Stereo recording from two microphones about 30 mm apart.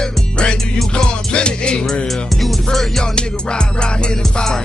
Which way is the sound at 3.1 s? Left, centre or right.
Left.